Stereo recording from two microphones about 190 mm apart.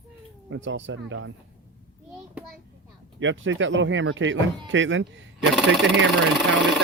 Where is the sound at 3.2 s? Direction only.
80° right.